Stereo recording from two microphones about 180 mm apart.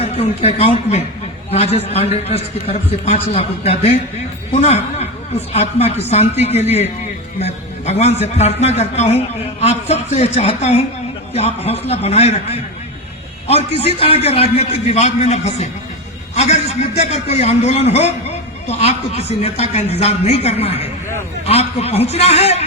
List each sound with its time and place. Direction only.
0.0 s a man's voice: 35° left (ahead or behind)